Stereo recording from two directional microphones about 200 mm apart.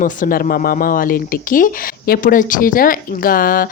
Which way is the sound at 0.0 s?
45° left (ahead or behind).